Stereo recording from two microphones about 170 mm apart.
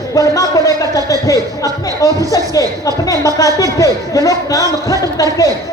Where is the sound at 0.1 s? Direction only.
20° left (ahead or behind).